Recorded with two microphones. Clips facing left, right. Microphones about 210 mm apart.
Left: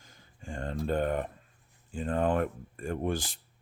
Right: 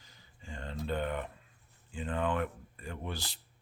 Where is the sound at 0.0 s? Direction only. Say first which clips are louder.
Left 6 dB; 50° left (ahead or behind).